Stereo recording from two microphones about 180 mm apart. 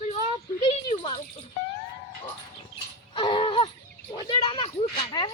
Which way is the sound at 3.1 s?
25° left (ahead or behind).